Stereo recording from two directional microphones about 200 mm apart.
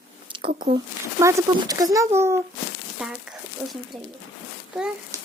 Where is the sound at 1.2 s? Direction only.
15° right (ahead or behind).